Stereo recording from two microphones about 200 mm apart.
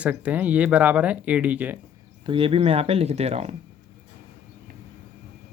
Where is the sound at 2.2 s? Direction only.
25° right (ahead or behind).